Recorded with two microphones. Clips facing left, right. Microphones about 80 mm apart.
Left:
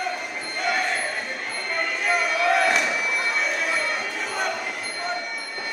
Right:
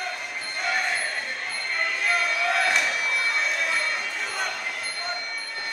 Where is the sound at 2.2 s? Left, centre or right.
Centre.